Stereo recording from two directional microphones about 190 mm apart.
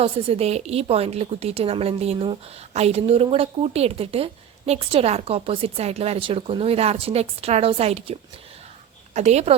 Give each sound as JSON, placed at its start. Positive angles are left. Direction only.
{"t": 0.0, "sound": "a woman's voice", "side_deg": -30}